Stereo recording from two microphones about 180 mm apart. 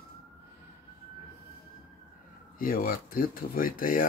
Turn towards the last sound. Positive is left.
turn(degrees=50)  # may be behind; listen again after turning